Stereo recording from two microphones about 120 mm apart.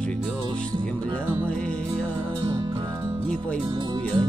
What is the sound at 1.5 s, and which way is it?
Music, 10° left (ahead or behind).